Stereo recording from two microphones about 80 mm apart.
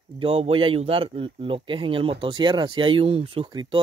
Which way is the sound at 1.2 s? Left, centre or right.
Right.